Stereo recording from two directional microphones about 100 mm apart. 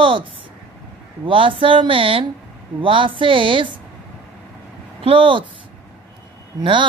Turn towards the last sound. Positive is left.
turn(degrees=-50)  # may be behind; listen again after turning